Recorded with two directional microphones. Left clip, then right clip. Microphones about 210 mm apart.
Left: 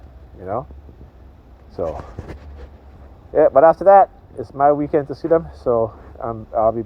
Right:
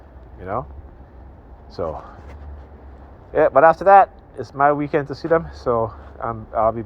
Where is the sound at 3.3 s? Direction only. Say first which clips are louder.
Left 2 dB; 40° left (ahead or behind).